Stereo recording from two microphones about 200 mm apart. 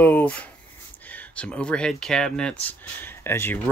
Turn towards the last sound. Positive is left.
turn(degrees=10)  # may be behind; listen again after turning